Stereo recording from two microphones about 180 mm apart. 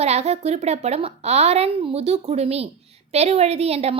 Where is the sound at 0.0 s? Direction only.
35° right (ahead or behind).